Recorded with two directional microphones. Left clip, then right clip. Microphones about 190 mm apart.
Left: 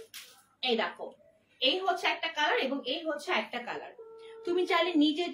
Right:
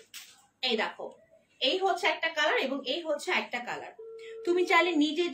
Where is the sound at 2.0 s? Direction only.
20° right (ahead or behind).